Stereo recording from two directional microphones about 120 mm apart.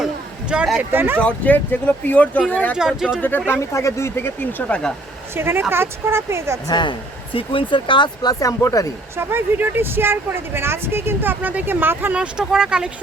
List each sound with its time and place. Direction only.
0.5 s speech: 10° right (ahead or behind)
1.2 s speech: 15° left (ahead or behind)
2.7 s speech: 5° right (ahead or behind)
3.2 s speech: 15° left (ahead or behind)
3.6 s speech: 25° left (ahead or behind)
5.4 s speech: 20° right (ahead or behind)
6.7 s speech: 40° left (ahead or behind)
9.1 s speech: 15° right (ahead or behind)